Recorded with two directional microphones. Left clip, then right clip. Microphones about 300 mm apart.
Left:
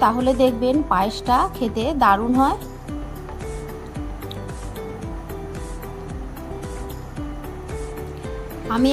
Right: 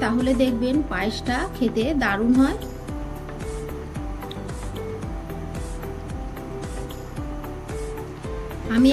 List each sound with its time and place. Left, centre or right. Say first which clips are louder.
0.0 s a woman's voice: left 5 dB; centre